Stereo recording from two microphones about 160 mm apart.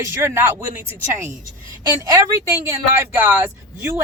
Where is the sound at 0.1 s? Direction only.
15° right (ahead or behind).